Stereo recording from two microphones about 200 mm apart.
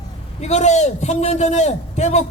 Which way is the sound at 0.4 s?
35° left (ahead or behind).